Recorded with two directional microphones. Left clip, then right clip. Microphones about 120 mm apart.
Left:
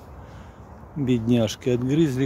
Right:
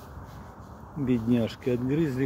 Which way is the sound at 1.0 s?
80° left.